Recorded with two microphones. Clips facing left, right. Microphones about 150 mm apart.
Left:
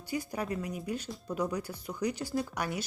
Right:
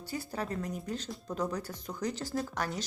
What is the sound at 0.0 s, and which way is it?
Speech, 15° left (ahead or behind).